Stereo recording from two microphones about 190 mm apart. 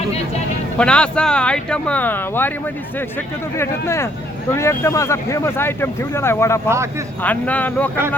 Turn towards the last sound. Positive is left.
turn(degrees=10)  # may be behind; listen again after turning